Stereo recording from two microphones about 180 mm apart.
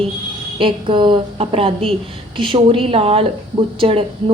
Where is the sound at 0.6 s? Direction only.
30° right (ahead or behind).